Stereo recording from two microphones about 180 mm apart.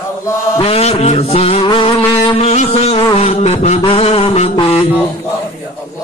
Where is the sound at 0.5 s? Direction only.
35° left (ahead or behind).